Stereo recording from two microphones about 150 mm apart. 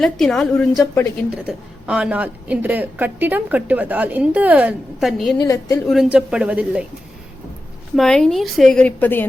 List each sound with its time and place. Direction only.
0.0 s a woman's voice: centre (ahead or behind)
1.5 s a woman's voice: 5° right (ahead or behind)
4.9 s a woman's voice: centre (ahead or behind)
5.4 s a woman's voice: 25° left (ahead or behind)
5.9 s a woman's voice: 5° right (ahead or behind)
7.9 s a woman's voice: 5° left (ahead or behind)